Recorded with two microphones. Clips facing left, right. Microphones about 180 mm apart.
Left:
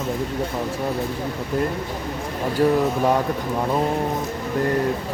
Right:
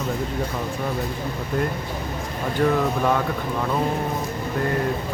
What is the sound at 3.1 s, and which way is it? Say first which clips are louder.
Speech: left 2 dB; 20° left (ahead or behind).